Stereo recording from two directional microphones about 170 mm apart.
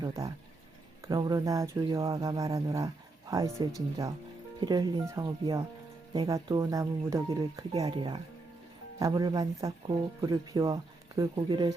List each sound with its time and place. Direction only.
1.0 s speech: 20° right (ahead or behind)